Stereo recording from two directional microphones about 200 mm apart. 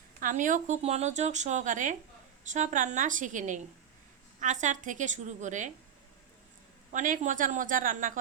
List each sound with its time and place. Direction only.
0.2 s speech: 40° right (ahead or behind)
6.9 s speech: 40° right (ahead or behind)